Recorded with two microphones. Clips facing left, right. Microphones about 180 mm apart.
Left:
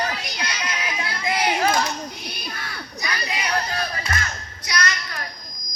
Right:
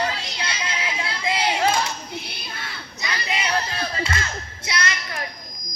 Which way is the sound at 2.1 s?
25° right (ahead or behind).